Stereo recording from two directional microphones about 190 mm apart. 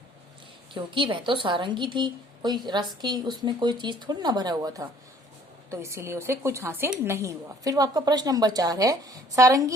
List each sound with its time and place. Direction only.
0.7 s a woman's voice: 25° right (ahead or behind)